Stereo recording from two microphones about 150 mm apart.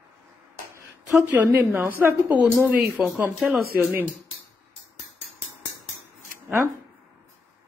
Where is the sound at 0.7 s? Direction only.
15° right (ahead or behind).